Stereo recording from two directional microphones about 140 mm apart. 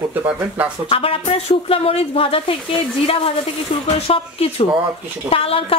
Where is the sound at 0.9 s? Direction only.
40° left (ahead or behind).